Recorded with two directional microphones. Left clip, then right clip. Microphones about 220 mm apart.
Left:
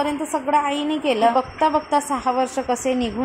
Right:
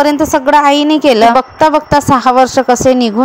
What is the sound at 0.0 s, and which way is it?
A woman's voice, 40° right (ahead or behind).